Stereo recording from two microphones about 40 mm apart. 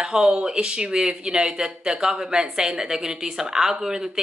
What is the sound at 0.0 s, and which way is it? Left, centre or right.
A woman's voice, centre.